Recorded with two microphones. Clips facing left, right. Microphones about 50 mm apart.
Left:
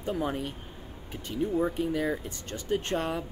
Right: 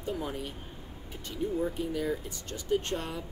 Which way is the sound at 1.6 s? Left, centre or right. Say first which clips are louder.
Left 3 dB; left.